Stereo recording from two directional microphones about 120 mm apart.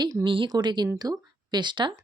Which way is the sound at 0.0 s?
30° right (ahead or behind).